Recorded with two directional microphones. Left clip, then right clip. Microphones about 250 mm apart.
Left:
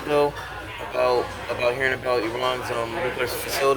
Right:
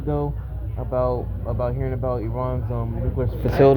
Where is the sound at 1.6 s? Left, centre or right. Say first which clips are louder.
Left 5 dB; centre.